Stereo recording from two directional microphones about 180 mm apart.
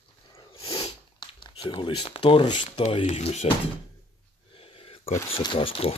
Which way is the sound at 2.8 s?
35° left (ahead or behind).